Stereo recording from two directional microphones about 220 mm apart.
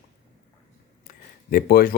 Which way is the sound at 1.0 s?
40° left (ahead or behind).